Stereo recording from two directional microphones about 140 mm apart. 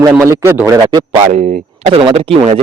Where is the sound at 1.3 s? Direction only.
50° right (ahead or behind).